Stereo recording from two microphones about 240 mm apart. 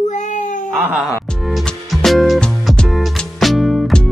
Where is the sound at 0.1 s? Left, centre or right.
Left.